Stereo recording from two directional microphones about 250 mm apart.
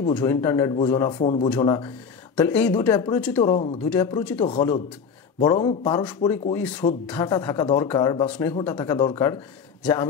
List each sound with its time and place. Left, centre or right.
0.2 s speech: centre
2.3 s a man's voice: centre
6.0 s speech: centre